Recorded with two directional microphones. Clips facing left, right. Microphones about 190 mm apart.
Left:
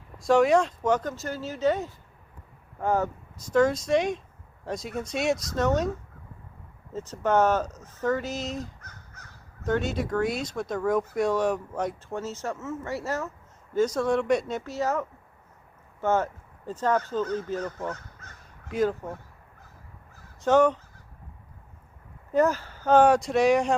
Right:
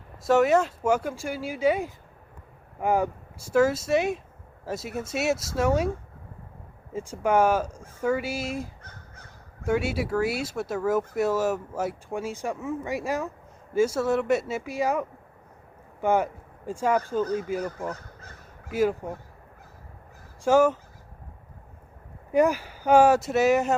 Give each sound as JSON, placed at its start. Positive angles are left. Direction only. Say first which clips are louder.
{"t": 0.2, "sound": "speech", "louder": "even", "side_deg": -5}
{"t": 6.9, "sound": "speech", "louder": "right 1 dB", "side_deg": -10}
{"t": 8.8, "sound": "crow", "louder": "right 2 dB", "side_deg": -30}
{"t": 9.6, "sound": "speech", "louder": "right 1 dB", "side_deg": -10}
{"t": 17.8, "sound": "crow", "louder": "even", "side_deg": -35}
{"t": 18.7, "sound": "speech", "louder": "right 1 dB", "side_deg": -10}
{"t": 20.4, "sound": "speech", "louder": "right 1 dB", "side_deg": -10}
{"t": 22.3, "sound": "speech", "louder": "right 1 dB", "side_deg": -10}